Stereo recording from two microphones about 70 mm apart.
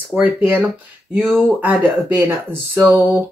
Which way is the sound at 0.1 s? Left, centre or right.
Right.